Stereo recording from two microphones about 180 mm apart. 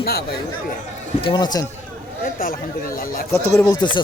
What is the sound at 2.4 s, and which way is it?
Speech, 55° left (ahead or behind).